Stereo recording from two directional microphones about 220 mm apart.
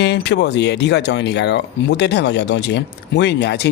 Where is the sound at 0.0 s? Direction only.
50° left (ahead or behind).